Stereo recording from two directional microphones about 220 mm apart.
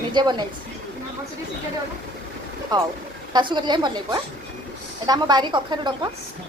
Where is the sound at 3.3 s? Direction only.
20° right (ahead or behind).